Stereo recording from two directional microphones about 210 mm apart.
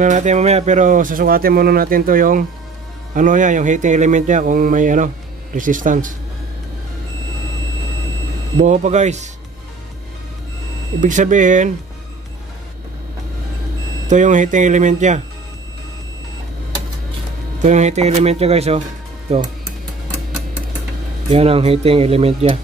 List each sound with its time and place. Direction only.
0.0 s speech: 35° right (ahead or behind)
8.5 s speech: 35° right (ahead or behind)
11.0 s speech: 35° right (ahead or behind)
14.0 s speech: 35° right (ahead or behind)
17.6 s speech: 35° right (ahead or behind)
21.3 s speech: 30° right (ahead or behind)